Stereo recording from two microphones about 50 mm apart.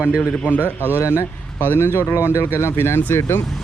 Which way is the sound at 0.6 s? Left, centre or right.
Right.